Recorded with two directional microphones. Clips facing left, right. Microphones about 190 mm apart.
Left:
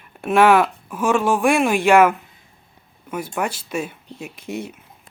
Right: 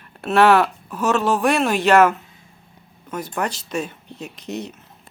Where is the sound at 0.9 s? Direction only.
10° left (ahead or behind).